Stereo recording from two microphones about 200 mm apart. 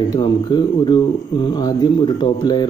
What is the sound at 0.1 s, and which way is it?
Speech, 20° left (ahead or behind).